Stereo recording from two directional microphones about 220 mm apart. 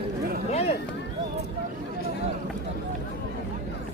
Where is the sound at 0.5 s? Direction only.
30° left (ahead or behind).